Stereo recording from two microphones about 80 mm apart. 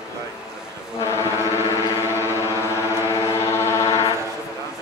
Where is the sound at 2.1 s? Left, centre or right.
Left.